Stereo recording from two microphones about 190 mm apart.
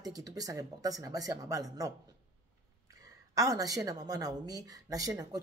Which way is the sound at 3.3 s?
15° right (ahead or behind).